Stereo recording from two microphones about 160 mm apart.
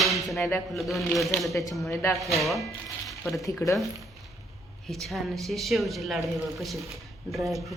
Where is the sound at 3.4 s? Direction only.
20° left (ahead or behind).